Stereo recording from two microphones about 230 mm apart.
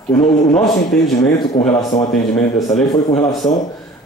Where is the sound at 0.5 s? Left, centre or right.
Centre.